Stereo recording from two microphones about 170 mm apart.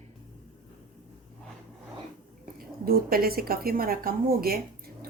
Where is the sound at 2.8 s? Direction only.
60° right (ahead or behind).